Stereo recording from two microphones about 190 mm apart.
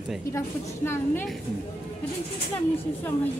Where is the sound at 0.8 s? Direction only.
10° left (ahead or behind).